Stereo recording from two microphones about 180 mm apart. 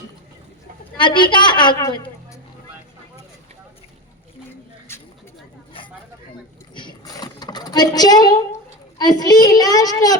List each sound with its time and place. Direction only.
0.9 s a child's voice: 25° left (ahead or behind)
4.9 s a sound: 15° left (ahead or behind)
6.7 s sewing machine: 25° left (ahead or behind)
9.0 s a child's voice: 20° left (ahead or behind)